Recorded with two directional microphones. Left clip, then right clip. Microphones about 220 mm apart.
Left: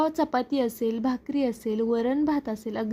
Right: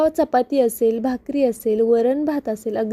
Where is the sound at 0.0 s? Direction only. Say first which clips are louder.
Right 7 dB; 15° right (ahead or behind).